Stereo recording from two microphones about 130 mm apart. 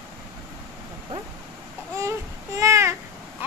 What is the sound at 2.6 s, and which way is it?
Babbling, 20° right (ahead or behind).